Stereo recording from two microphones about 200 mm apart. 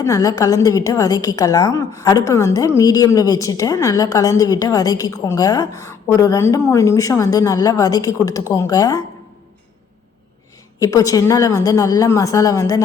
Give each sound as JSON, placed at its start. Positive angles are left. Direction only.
{"t": 0.0, "sound": "a woman's voice", "side_deg": 15}
{"t": 10.8, "sound": "a woman's voice", "side_deg": 15}